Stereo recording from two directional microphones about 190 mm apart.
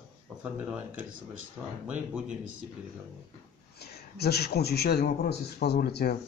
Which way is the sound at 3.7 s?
60° left (ahead or behind).